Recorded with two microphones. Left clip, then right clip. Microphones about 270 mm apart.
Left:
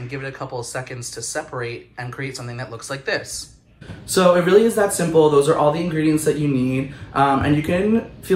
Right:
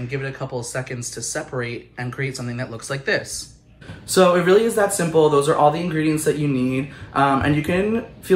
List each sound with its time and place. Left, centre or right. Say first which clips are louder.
0.1 s speech: right 1 dB; centre
4.1 s speech: left 1 dB; centre